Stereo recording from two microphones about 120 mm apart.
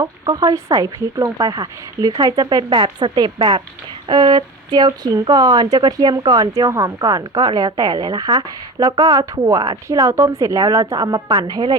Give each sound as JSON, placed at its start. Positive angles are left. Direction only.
{"t": 0.0, "sound": "speech", "side_deg": -35}